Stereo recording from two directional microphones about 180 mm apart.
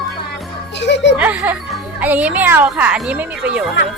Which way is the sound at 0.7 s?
75° left (ahead or behind).